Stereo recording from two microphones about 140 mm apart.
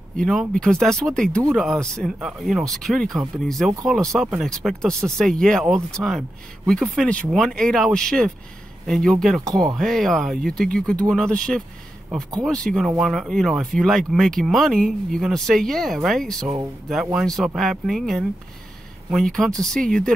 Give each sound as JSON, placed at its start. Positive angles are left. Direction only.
{"t": 0.2, "sound": "speech", "side_deg": 0}
{"t": 6.0, "sound": "speech", "side_deg": -15}
{"t": 6.7, "sound": "speech", "side_deg": 5}